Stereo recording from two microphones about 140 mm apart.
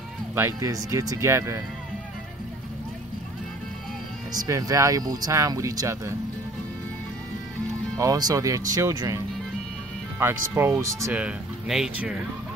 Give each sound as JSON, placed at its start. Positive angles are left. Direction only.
{"t": 0.3, "sound": "speech", "side_deg": -15}
{"t": 4.3, "sound": "speech", "side_deg": -25}
{"t": 8.0, "sound": "speech", "side_deg": -25}
{"t": 11.1, "sound": "speech", "side_deg": -5}